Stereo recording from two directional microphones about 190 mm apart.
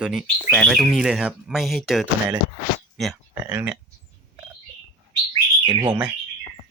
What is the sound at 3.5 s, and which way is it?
Speech, 10° right (ahead or behind).